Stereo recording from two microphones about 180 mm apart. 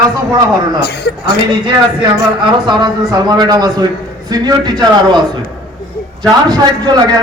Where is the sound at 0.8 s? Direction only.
70° left (ahead or behind).